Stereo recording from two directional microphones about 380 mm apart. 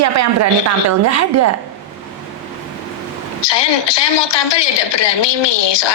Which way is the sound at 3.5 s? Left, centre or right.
Left.